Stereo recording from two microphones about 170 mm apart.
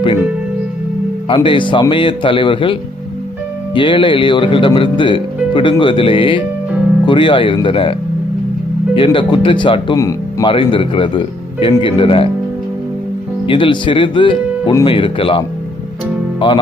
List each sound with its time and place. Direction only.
1.3 s speech: 30° left (ahead or behind)
3.8 s speech: 30° left (ahead or behind)
9.0 s speech: 30° left (ahead or behind)
13.5 s speech: 30° left (ahead or behind)